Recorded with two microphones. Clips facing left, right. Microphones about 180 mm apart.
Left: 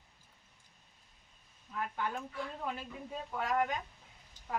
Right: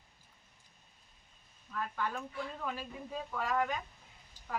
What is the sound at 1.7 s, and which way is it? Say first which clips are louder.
Speech: even; 20° left (ahead or behind).